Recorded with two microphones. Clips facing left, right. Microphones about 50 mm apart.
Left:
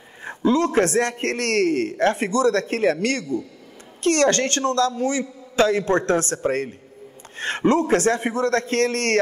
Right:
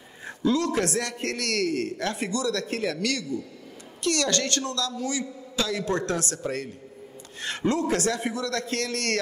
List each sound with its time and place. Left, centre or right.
0.2 s a man's voice: left